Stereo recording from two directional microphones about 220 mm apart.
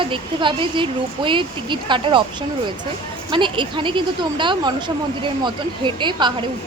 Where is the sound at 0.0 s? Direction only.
20° right (ahead or behind).